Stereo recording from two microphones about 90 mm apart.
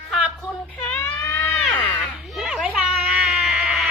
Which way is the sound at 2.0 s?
Centre (ahead or behind).